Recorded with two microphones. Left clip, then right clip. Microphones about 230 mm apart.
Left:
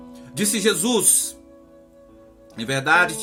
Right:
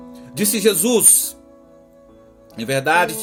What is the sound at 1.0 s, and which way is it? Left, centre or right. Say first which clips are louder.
Speech: right 4 dB; right.